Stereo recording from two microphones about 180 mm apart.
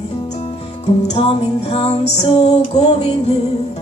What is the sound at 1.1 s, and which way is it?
Music, 35° left (ahead or behind).